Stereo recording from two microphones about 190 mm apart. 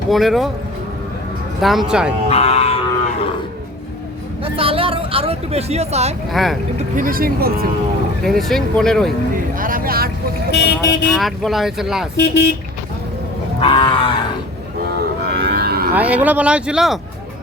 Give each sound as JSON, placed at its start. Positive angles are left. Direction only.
{"t": 0.1, "sound": "speech", "side_deg": 0}
{"t": 1.6, "sound": "speech", "side_deg": 0}
{"t": 2.3, "sound": "livestock", "side_deg": 30}
{"t": 4.4, "sound": "speech", "side_deg": -30}
{"t": 6.3, "sound": "speech", "side_deg": 0}
{"t": 6.7, "sound": "speech", "side_deg": -45}
{"t": 8.2, "sound": "speech", "side_deg": 0}
{"t": 9.6, "sound": "speech", "side_deg": -45}
{"t": 10.5, "sound": "speech", "side_deg": 60}
{"t": 11.1, "sound": "speech", "side_deg": 0}
{"t": 12.1, "sound": "speech", "side_deg": 60}
{"t": 13.6, "sound": "wild animals", "side_deg": 30}
{"t": 15.2, "sound": "cattle", "side_deg": -55}
{"t": 16.0, "sound": "speech", "side_deg": -10}